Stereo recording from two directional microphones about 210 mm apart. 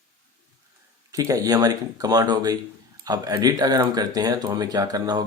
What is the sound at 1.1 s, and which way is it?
Speech, 15° right (ahead or behind).